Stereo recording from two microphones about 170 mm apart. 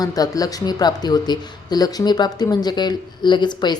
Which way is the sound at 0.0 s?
20° left (ahead or behind).